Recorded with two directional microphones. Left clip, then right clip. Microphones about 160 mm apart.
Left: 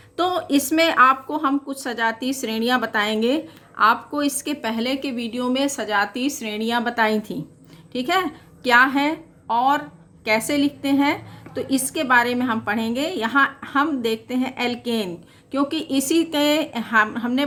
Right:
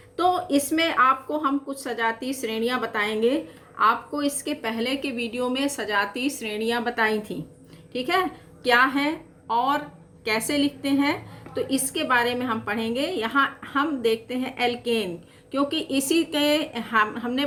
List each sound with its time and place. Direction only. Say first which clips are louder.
0.2 s a woman's voice: left 1 dB; 55° left (ahead or behind)